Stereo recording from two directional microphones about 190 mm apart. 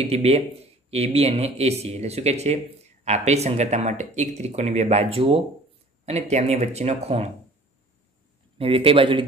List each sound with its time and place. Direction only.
0.0 s speech: 30° right (ahead or behind)
8.5 s a man's voice: 30° right (ahead or behind)